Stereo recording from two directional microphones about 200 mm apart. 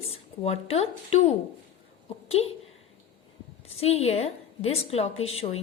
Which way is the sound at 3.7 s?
30° left (ahead or behind).